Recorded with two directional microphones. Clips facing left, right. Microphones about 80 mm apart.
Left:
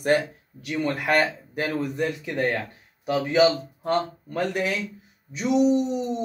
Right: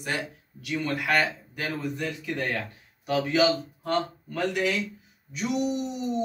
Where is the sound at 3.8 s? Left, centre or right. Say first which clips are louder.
Left 3 dB; left.